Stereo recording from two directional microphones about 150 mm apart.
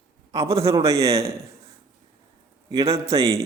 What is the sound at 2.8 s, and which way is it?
Speech, 40° right (ahead or behind).